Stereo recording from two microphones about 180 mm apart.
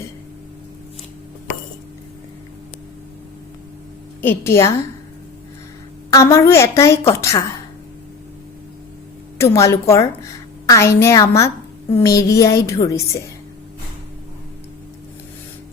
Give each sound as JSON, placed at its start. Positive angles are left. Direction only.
{"t": 4.2, "sound": "a woman's voice", "side_deg": 15}
{"t": 6.1, "sound": "a woman's voice", "side_deg": 15}
{"t": 9.4, "sound": "a woman's voice", "side_deg": 15}